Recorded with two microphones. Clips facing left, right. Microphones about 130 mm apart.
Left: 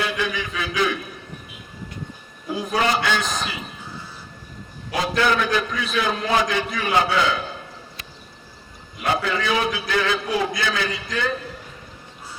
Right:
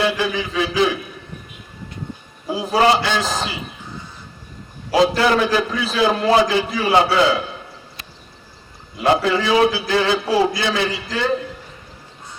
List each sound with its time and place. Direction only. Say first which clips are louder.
0.0 s a man's voice: right 5 dB; 30° right (ahead or behind)
2.5 s a man's voice: right 6 dB; 30° right (ahead or behind)
5.1 s a man's voice: right 4 dB; 30° right (ahead or behind)
9.0 s a man's voice: right 6 dB; 30° right (ahead or behind)